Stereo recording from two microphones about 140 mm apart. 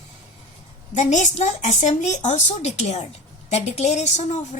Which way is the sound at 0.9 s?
60° left (ahead or behind).